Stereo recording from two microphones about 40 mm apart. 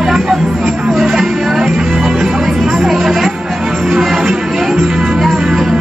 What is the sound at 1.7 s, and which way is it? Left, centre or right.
Music, centre.